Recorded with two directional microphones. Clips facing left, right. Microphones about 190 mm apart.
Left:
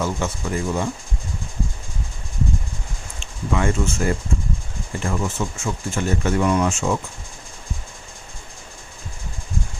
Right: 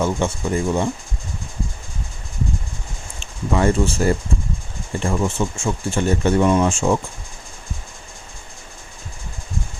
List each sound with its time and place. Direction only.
0.0 s speech: 25° right (ahead or behind)
3.5 s speech: 35° right (ahead or behind)